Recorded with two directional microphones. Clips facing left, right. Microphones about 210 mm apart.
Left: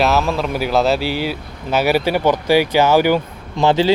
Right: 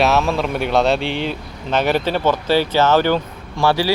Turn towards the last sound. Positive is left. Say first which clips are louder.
# left 3 dB
turn(degrees=20)  # may be behind; listen again after turning